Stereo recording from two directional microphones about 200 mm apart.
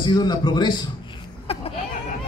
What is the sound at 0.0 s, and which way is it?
Speech, 20° left (ahead or behind).